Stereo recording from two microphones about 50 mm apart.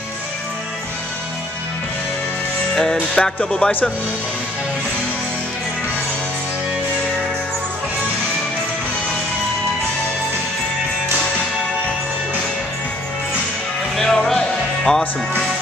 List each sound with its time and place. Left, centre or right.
2.7 s music: centre
13.9 s music: centre